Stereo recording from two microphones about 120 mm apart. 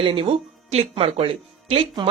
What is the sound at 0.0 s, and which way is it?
Speech, 50° right (ahead or behind).